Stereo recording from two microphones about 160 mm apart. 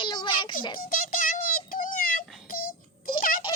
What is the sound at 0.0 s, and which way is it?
Music, 30° left (ahead or behind).